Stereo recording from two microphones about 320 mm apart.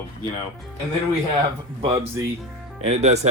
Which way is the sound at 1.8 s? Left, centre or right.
Centre.